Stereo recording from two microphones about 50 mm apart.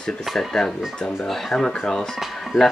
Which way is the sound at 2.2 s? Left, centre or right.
Centre.